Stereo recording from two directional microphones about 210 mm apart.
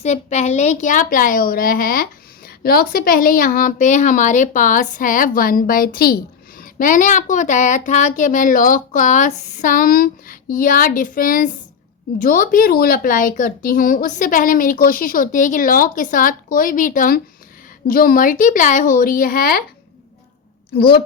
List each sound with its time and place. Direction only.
0.0 s a woman's voice: 35° left (ahead or behind)
20.7 s a woman's voice: 45° left (ahead or behind)